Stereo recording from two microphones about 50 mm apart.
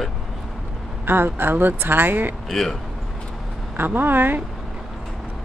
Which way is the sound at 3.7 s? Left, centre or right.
Right.